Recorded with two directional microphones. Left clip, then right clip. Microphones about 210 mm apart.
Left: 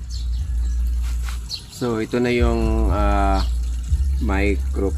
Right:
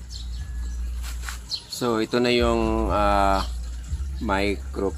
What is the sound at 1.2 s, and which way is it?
Speech, 35° right (ahead or behind).